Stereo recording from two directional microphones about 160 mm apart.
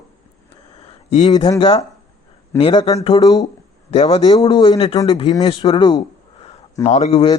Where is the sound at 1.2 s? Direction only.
25° left (ahead or behind).